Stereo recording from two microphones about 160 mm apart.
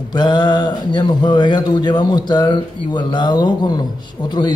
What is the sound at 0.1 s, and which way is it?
Speech, 25° left (ahead or behind).